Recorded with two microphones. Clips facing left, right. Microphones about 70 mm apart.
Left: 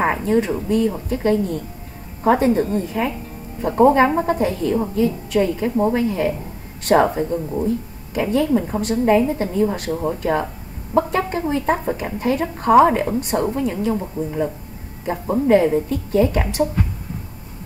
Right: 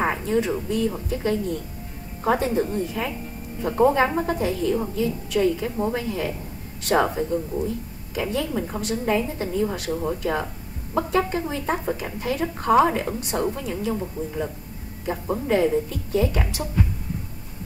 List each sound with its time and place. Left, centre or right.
0.0 s a sound: left
0.7 s speech: left
3.6 s speech: left
8.8 s speech: left
11.0 s speech: left